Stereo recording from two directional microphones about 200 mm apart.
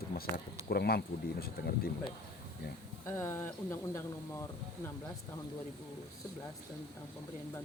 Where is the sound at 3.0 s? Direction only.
15° left (ahead or behind).